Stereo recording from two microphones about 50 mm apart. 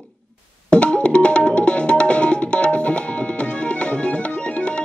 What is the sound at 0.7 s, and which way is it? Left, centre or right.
Music, left.